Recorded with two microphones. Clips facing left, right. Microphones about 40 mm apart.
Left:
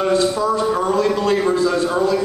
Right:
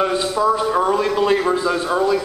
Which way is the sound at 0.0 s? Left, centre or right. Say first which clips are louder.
Left 1 dB; centre.